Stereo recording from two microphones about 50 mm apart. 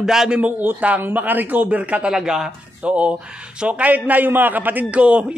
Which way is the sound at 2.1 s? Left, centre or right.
Centre.